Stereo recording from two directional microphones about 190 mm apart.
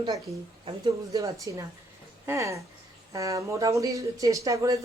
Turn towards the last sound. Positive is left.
turn(degrees=-15)  # may be behind; listen again after turning